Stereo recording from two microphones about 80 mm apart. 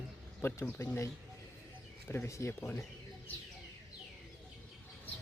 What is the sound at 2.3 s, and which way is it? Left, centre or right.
Speech, left.